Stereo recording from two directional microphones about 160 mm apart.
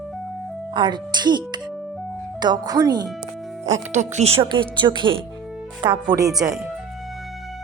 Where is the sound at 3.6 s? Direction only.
45° right (ahead or behind).